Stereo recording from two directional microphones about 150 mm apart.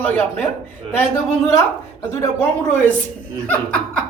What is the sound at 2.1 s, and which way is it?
Speech, 15° left (ahead or behind).